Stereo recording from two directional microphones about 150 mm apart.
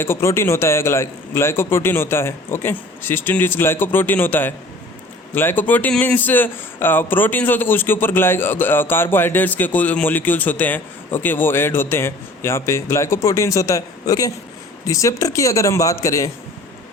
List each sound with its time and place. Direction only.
0.0 s speech: 15° left (ahead or behind)